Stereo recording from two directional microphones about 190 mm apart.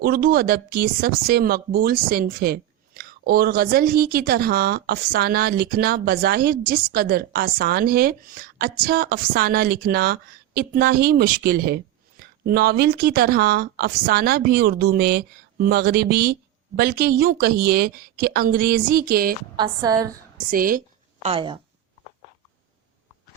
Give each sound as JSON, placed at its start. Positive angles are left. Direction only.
{"t": 0.0, "sound": "a woman's voice", "side_deg": -50}
{"t": 19.5, "sound": "a woman's voice", "side_deg": -20}
{"t": 20.5, "sound": "a sound", "side_deg": -45}
{"t": 21.2, "sound": "a woman's voice", "side_deg": -25}